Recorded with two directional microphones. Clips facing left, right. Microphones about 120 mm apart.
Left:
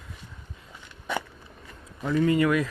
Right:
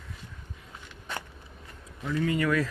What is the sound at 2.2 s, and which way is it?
Speech, 20° left (ahead or behind).